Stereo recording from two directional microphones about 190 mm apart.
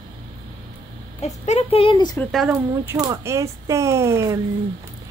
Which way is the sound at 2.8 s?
20° right (ahead or behind).